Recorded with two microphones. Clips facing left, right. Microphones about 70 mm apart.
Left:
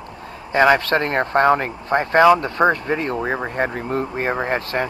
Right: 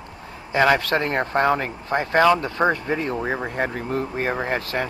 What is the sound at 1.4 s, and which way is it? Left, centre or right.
Speech, left.